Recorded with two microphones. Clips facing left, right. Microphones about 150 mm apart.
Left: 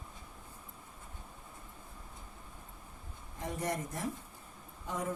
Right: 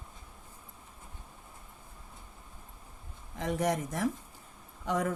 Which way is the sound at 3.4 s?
90° right.